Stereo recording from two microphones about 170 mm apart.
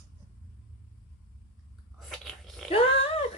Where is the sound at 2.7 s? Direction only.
35° left (ahead or behind).